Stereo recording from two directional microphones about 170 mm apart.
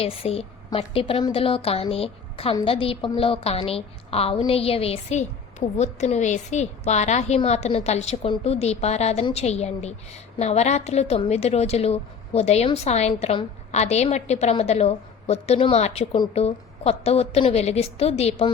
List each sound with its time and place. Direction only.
0.0 s a woman's voice: 35° left (ahead or behind)